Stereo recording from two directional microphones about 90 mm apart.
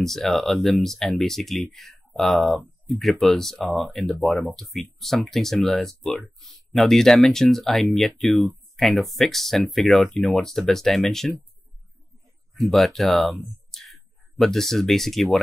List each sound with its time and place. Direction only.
0.0 s speech: 5° left (ahead or behind)
12.5 s speech: centre (ahead or behind)
13.7 s a sound: centre (ahead or behind)
14.4 s speech: 5° left (ahead or behind)